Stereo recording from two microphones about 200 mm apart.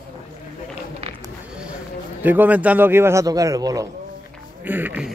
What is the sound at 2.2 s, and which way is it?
Speech, 10° right (ahead or behind).